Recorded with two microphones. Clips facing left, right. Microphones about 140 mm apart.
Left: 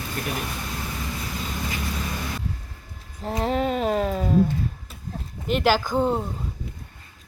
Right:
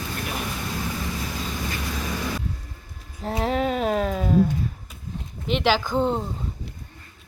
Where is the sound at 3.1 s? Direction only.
Centre (ahead or behind).